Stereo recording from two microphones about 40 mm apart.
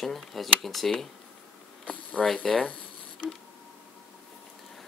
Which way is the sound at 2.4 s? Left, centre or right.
Centre.